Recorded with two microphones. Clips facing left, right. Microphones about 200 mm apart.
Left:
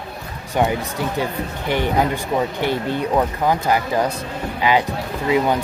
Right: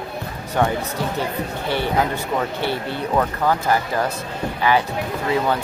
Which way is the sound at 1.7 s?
15° left (ahead or behind).